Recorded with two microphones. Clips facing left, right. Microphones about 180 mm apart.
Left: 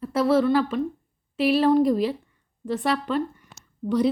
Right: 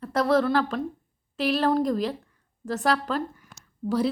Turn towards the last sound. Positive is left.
turn(degrees=-5)  # may be behind; listen again after turning